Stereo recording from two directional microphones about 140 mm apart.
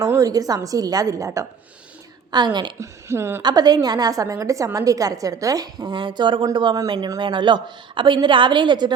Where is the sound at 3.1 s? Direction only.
20° right (ahead or behind).